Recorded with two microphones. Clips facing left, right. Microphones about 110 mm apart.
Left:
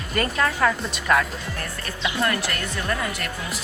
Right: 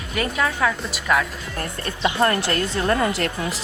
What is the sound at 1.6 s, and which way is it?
Speech, 35° right (ahead or behind).